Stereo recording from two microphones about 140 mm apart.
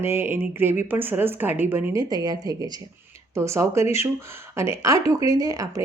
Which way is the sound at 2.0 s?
25° right (ahead or behind).